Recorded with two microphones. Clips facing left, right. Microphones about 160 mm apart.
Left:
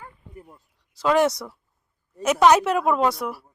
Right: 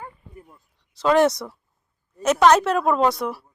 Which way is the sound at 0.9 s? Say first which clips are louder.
Right 2 dB; 5° left (ahead or behind).